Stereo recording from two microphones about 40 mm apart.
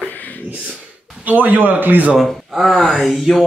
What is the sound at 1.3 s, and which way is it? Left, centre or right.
Speech, right.